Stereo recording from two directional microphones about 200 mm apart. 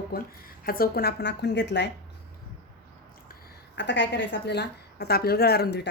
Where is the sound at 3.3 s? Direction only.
50° left (ahead or behind).